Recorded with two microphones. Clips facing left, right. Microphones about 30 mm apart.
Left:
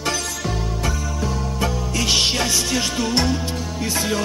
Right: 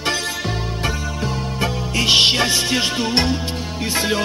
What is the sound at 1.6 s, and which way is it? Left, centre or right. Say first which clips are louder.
Music: right 3 dB; right.